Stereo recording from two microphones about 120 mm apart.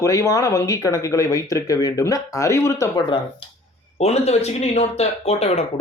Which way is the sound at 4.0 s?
60° left (ahead or behind).